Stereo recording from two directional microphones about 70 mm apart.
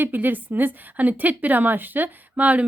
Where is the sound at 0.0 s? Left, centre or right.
Right.